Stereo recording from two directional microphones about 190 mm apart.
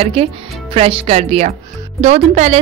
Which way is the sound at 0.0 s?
30° right (ahead or behind).